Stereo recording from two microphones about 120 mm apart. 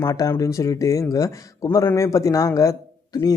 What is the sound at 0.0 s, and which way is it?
Speech, 30° left (ahead or behind).